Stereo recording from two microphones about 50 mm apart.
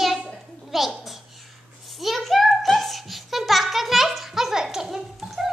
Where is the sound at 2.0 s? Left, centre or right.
Centre.